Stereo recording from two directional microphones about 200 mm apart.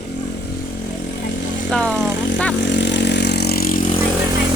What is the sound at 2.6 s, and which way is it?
Vehicle, 60° left (ahead or behind).